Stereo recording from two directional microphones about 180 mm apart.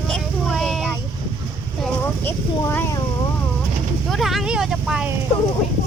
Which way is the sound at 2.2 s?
15° left (ahead or behind).